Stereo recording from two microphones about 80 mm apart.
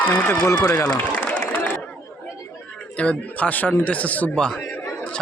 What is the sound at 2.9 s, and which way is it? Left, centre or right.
Speech, centre.